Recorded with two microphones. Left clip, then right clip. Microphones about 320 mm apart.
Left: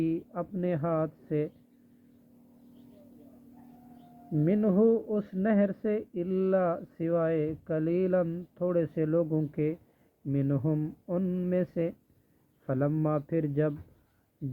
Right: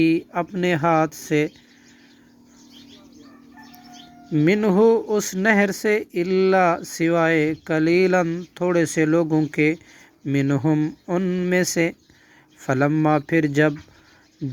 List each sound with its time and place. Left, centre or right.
0.0 s speech: right
4.4 s speech: right